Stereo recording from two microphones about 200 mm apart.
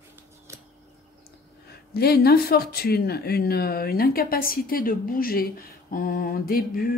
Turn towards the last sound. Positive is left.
turn(degrees=45)  # may be behind; listen again after turning